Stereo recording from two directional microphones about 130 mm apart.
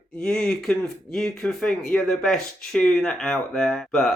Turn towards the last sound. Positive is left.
turn(degrees=0)  # may be behind; listen again after turning